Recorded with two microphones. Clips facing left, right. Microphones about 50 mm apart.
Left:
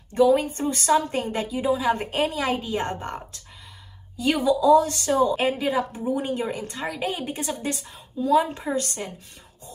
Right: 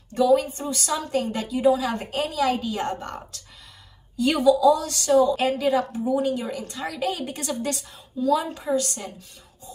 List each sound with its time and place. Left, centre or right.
0.1 s a woman's voice: left
1.5 s a woman's voice: centre
1.8 s a woman's voice: left
4.2 s a woman's voice: centre
4.5 s a woman's voice: left
8.2 s a woman's voice: left